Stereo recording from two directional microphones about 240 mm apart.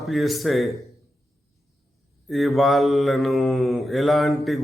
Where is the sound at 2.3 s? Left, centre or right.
Centre.